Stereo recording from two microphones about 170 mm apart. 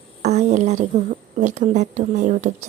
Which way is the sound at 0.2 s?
40° right (ahead or behind).